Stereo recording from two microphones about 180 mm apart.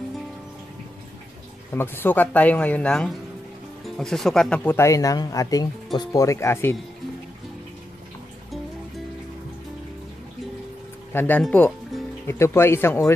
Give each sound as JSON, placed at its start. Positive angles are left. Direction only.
{"t": 1.7, "sound": "speech", "side_deg": 10}
{"t": 11.1, "sound": "speech", "side_deg": 10}